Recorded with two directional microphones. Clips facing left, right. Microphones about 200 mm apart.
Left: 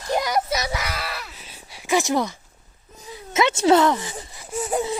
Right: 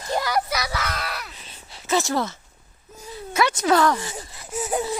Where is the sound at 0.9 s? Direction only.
Centre (ahead or behind); by 4.1 s 20° left (ahead or behind).